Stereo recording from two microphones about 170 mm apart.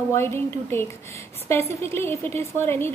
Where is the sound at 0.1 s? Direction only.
15° left (ahead or behind).